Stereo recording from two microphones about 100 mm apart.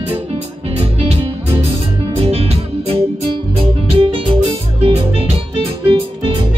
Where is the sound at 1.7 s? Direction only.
80° right.